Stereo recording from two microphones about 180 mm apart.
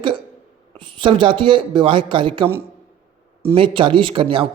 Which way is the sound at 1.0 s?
25° right (ahead or behind).